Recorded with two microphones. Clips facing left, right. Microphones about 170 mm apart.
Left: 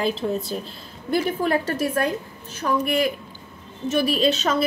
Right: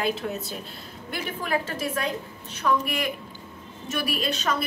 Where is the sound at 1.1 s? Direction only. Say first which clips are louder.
Left 7 dB; 40° left (ahead or behind).